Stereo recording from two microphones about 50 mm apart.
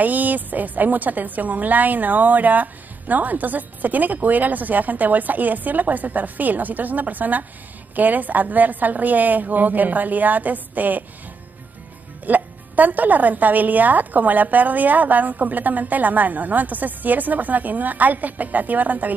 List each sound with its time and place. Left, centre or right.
0.0 s a woman's voice: right
12.3 s a woman's voice: right